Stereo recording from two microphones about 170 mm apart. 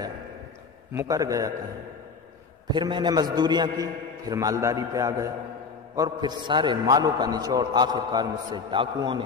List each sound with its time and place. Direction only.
0.9 s a man's voice: 20° right (ahead or behind)
2.7 s a man's voice: 25° right (ahead or behind)